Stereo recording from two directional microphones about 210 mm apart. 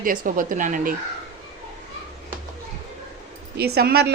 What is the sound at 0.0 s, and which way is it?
Speech, 40° right (ahead or behind).